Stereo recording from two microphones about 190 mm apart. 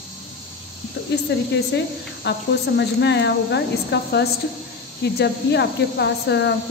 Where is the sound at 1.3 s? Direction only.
60° left (ahead or behind).